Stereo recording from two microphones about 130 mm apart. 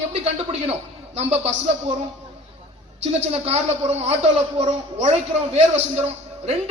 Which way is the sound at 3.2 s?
55° right (ahead or behind).